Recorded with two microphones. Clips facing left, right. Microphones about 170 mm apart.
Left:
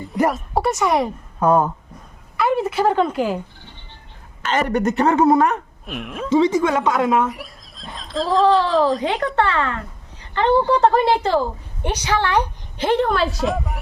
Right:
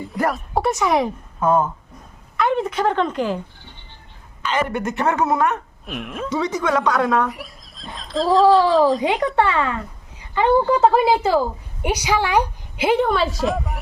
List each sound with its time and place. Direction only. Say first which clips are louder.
0.3 s speech: left 1 dB; centre (ahead or behind)
1.4 s speech: left 2 dB; 40° left (ahead or behind)
2.4 s speech: left 1 dB; 5° left (ahead or behind)
4.7 s speech: left 4 dB; 40° left (ahead or behind)
5.8 s speech: even; centre (ahead or behind)
6.3 s a woman's voice: left 5 dB; 25° left (ahead or behind)
7.3 s a woman's voice: left 1 dB; centre (ahead or behind)